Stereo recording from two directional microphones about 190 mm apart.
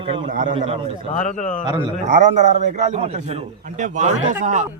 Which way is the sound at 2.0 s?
40° right (ahead or behind).